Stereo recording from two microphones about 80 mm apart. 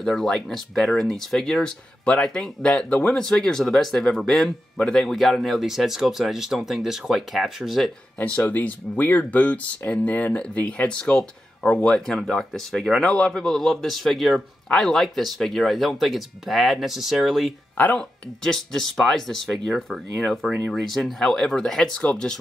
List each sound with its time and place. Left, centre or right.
0.0 s a man's voice: centre
8.5 s a man's voice: left; by 17.6 s centre
17.7 s speech: centre
18.4 s a man's voice: centre